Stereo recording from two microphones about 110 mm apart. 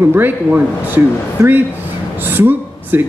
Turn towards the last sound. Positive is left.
turn(degrees=-20)  # may be behind; listen again after turning